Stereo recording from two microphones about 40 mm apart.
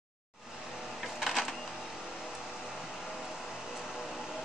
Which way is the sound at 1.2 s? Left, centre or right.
Centre.